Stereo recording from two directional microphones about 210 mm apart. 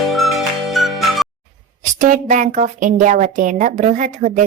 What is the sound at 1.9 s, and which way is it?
A woman's voice, 35° right (ahead or behind).